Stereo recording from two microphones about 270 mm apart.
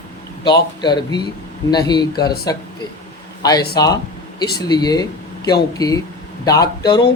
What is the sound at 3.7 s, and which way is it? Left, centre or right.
Speech, centre.